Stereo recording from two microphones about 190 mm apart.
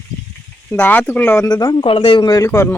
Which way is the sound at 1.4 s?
20° left (ahead or behind).